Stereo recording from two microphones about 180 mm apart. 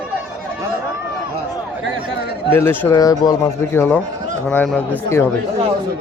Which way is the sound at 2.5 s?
15° left (ahead or behind).